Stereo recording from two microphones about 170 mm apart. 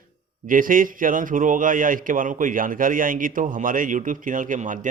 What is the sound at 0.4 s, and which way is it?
A man's voice, 55° right (ahead or behind).